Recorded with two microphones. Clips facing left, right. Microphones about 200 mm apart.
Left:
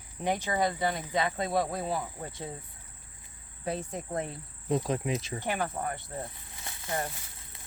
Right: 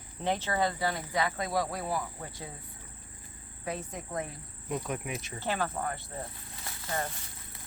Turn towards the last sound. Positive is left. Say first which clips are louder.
# left 1 dB
turn(degrees=20)  # may be behind; listen again after turning